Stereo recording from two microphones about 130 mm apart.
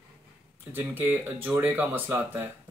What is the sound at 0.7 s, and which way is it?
Speech, 15° right (ahead or behind).